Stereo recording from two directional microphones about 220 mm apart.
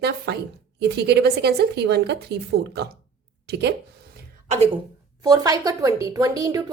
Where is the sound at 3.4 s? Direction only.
50° right (ahead or behind).